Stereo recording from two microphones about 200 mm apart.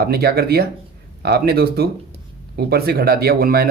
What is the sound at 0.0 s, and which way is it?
Speech, 50° right (ahead or behind).